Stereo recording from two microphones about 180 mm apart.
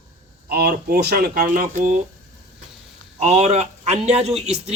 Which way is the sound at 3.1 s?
35° right (ahead or behind).